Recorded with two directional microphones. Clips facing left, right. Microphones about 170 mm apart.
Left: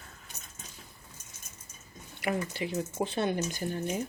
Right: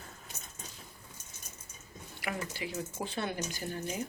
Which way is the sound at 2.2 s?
30° left (ahead or behind).